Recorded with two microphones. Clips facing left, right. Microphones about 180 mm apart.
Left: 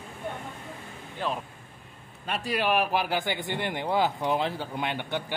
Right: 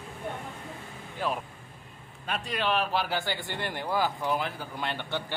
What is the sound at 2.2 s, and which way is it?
A man's voice, 5° left (ahead or behind).